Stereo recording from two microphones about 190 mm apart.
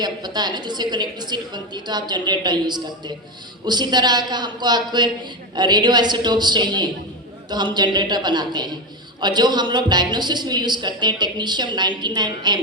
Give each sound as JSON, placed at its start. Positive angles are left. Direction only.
{"t": 0.0, "sound": "a woman's voice", "side_deg": -20}